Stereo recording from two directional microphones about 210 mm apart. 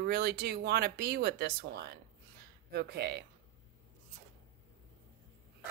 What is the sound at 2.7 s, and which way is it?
Speech, 50° right (ahead or behind).